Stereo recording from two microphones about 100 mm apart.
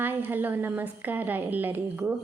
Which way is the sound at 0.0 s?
20° right (ahead or behind).